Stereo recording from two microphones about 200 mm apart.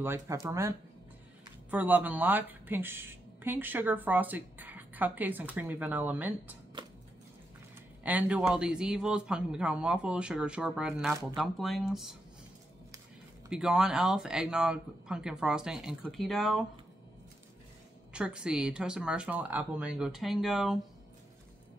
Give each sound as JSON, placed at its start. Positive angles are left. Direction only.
{"t": 0.0, "sound": "a woman's voice", "side_deg": -15}
{"t": 6.8, "sound": "a sound", "side_deg": -25}
{"t": 8.0, "sound": "a man's voice", "side_deg": -5}
{"t": 13.5, "sound": "a man's voice", "side_deg": -5}
{"t": 18.1, "sound": "a man's voice", "side_deg": -5}